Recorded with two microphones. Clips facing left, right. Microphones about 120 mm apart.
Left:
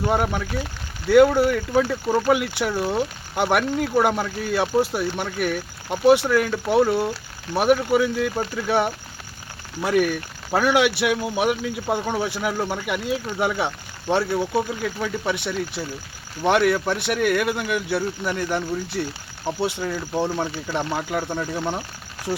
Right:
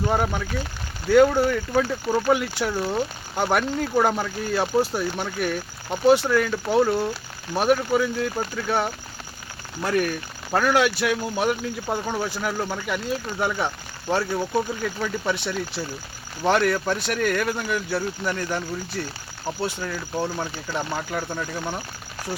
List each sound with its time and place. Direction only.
0.1 s speech: 5° left (ahead or behind)
19.5 s speech: 20° left (ahead or behind)